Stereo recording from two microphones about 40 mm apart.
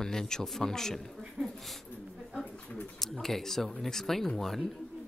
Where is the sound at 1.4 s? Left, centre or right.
Right.